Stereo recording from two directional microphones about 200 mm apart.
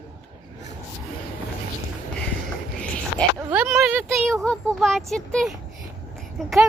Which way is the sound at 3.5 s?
10° right (ahead or behind).